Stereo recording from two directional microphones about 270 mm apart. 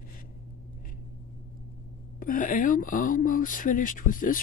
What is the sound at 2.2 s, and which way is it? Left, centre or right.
Speech, left.